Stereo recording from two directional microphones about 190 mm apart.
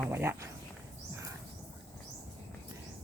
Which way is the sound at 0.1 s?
15° right (ahead or behind).